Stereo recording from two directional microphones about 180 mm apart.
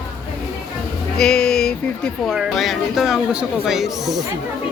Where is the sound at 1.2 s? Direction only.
5° left (ahead or behind).